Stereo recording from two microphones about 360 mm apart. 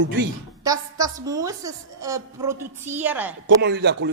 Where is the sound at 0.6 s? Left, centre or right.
Centre.